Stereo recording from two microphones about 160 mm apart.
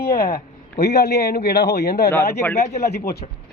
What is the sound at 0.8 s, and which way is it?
Speech, 90° left.